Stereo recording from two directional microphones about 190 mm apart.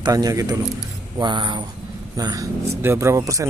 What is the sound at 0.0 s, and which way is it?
Speech, 20° right (ahead or behind).